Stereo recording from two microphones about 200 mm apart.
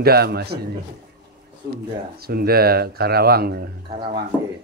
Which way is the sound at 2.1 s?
50° right (ahead or behind).